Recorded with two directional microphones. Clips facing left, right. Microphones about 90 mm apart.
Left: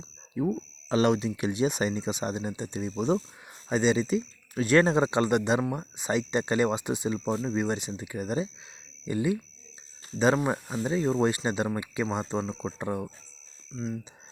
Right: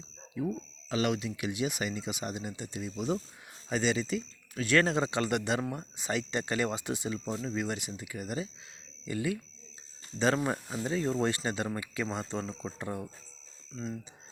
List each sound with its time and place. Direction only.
0.3 s speech: 35° left (ahead or behind)
10.4 s speech: 20° left (ahead or behind)
13.7 s speech: centre (ahead or behind)